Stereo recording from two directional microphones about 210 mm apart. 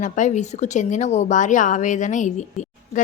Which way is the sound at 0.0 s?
35° left (ahead or behind).